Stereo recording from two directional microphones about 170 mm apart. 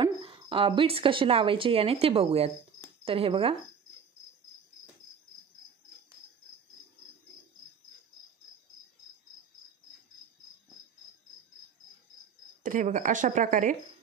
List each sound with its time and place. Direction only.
0.0 s speech: 30° right (ahead or behind)
12.6 s speech: 50° right (ahead or behind)